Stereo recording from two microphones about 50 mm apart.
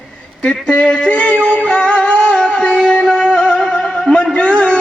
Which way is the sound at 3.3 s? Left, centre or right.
Left.